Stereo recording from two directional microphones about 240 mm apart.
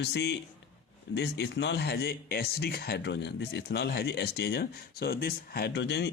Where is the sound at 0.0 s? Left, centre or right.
Left.